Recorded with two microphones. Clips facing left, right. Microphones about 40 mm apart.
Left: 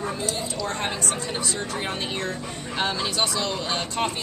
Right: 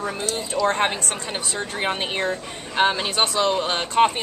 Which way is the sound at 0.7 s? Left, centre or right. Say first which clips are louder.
Right 7 dB; right.